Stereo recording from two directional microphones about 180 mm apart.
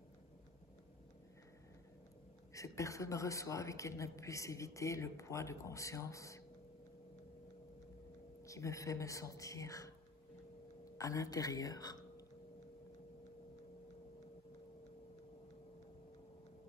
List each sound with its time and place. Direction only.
2.5 s speech: 15° left (ahead or behind)
8.5 s speech: 15° left (ahead or behind)
11.0 s a woman's voice: 20° left (ahead or behind)